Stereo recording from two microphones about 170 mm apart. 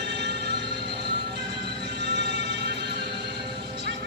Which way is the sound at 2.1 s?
90° right.